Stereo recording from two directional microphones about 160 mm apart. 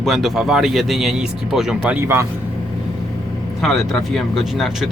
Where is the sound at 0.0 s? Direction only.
Centre (ahead or behind).